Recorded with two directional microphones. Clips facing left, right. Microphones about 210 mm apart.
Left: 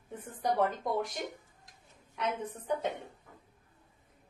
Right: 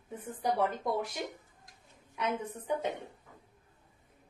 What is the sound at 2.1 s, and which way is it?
Speech, 10° right (ahead or behind).